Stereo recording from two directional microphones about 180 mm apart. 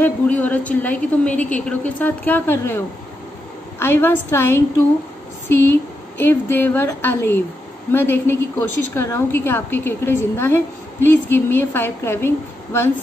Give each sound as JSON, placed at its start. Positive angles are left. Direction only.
{"t": 0.0, "sound": "a woman's voice", "side_deg": 10}
{"t": 3.8, "sound": "a woman's voice", "side_deg": 15}